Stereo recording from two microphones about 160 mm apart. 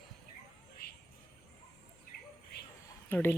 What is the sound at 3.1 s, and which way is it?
Speech, 10° left (ahead or behind).